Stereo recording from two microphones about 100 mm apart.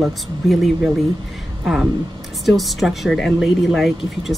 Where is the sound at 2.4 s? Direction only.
Centre (ahead or behind).